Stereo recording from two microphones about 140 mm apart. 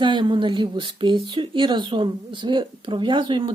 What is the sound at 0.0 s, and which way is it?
Speech, 35° right (ahead or behind).